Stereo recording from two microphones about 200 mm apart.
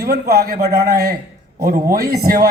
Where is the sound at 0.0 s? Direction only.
50° right (ahead or behind).